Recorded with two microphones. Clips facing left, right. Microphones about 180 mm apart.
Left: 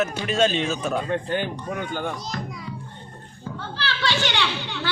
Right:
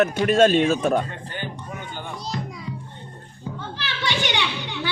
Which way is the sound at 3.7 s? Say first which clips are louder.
Left 2 dB; 20° right (ahead or behind).